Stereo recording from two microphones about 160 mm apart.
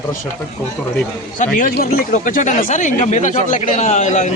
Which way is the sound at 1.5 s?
55° left (ahead or behind).